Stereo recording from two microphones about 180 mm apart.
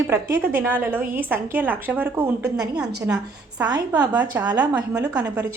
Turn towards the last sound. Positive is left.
turn(degrees=-15)  # may be behind; listen again after turning